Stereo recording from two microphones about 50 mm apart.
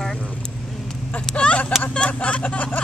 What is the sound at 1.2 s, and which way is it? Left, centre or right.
Vehicle, centre.